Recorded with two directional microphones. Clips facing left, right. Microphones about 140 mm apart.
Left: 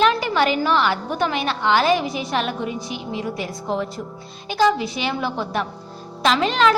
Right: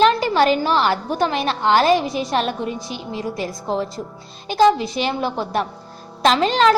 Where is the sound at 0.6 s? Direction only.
35° right (ahead or behind).